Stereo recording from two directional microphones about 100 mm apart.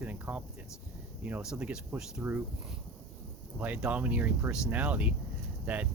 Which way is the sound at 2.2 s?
20° right (ahead or behind).